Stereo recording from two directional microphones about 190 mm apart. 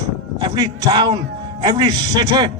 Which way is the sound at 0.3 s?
20° right (ahead or behind).